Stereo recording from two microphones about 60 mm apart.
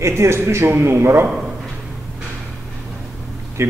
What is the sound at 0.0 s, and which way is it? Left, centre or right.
A man's voice, right.